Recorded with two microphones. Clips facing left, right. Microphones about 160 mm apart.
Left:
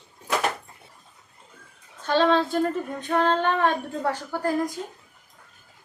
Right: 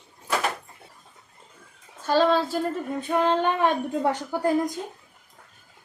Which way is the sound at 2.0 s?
5° right (ahead or behind).